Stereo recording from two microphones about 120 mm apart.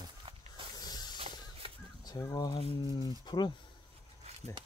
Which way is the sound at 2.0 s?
30° left (ahead or behind).